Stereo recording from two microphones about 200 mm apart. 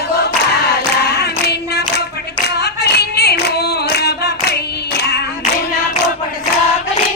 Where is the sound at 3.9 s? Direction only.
55° left (ahead or behind).